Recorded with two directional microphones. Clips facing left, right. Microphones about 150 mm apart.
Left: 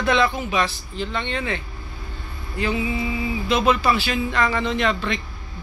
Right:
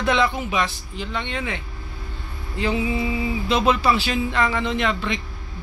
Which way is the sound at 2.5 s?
25° right (ahead or behind).